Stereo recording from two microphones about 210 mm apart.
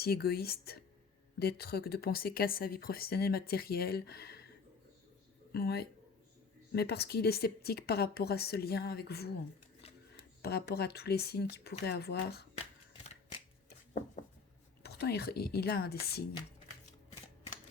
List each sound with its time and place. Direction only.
0.0 s speech: 50° left (ahead or behind)
5.5 s speech: 50° left (ahead or behind)
10.4 s speech: 50° left (ahead or behind)
14.8 s speech: 50° left (ahead or behind)